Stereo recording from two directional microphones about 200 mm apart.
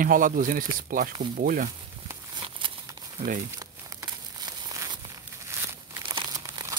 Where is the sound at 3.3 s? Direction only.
40° right (ahead or behind).